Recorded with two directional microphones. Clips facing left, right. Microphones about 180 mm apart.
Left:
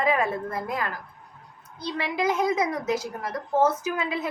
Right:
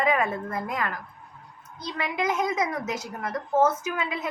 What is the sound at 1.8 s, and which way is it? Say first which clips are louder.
A woman's voice: left 2 dB; 35° left (ahead or behind).